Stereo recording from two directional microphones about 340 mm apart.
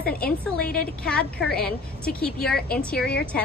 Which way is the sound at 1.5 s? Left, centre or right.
Left.